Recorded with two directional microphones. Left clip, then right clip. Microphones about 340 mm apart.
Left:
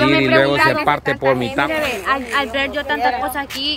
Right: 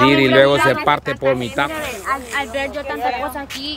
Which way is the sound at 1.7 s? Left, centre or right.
Left.